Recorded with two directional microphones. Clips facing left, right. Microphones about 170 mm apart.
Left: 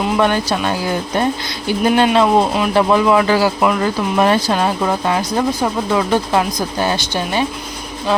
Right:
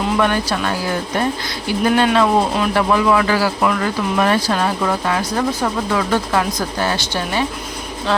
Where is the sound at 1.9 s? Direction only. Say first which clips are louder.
Left 2 dB; 20° left (ahead or behind).